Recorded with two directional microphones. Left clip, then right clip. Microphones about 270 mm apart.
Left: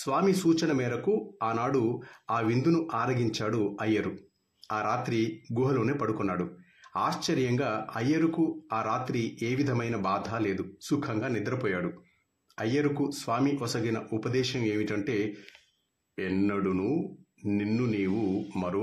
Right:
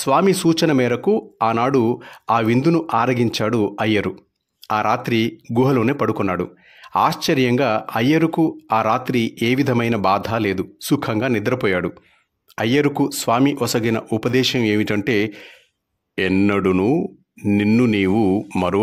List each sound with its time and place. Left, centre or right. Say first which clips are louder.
0.0 s speech: right 10 dB; right